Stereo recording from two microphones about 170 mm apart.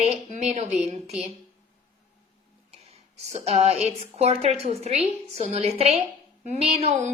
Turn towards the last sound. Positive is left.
turn(degrees=-35)  # may be behind; listen again after turning